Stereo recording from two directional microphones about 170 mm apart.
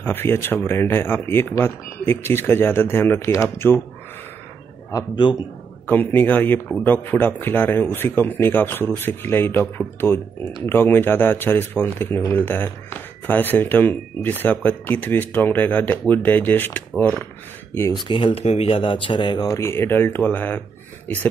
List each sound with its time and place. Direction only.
0.0 s a man's voice: 10° left (ahead or behind)
4.9 s speech: 25° left (ahead or behind)
5.9 s a man's voice: 10° left (ahead or behind)
18.0 s speech: 30° left (ahead or behind); by 20.6 s 10° left (ahead or behind)